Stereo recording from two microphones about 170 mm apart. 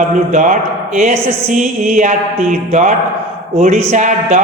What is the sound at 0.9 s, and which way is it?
Speech, 45° right (ahead or behind).